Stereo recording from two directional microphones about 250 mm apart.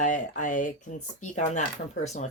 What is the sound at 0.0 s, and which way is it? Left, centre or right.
Speech, left.